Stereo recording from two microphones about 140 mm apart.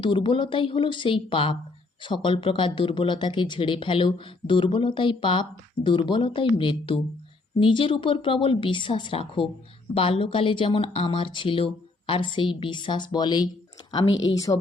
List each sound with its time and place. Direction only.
0.0 s speech: 35° left (ahead or behind)